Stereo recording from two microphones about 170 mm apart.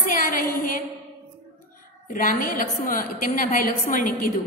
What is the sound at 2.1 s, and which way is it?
A woman's voice, 55° left (ahead or behind).